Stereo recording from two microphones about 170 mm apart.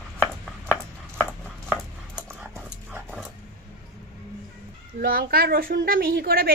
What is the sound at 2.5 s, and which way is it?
Dog, 5° right (ahead or behind).